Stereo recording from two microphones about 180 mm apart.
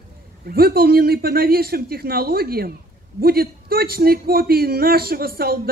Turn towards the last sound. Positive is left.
turn(degrees=-55)  # may be behind; listen again after turning